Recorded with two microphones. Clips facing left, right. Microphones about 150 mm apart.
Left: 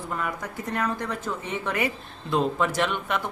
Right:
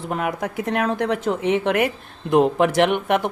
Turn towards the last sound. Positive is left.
turn(degrees=-65)  # may be behind; listen again after turning